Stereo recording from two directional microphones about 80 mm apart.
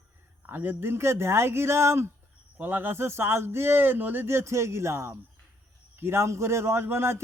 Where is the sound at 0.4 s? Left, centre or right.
Right.